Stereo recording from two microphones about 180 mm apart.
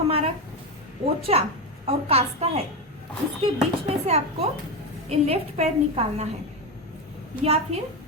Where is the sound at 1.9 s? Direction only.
35° right (ahead or behind).